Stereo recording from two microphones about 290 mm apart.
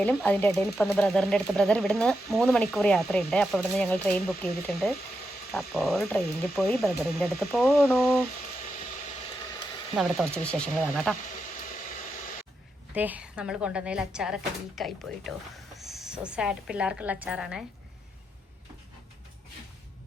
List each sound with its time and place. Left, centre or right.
0.0 s speech: centre
5.5 s speech: centre
9.9 s speech: centre
12.9 s a woman's voice: centre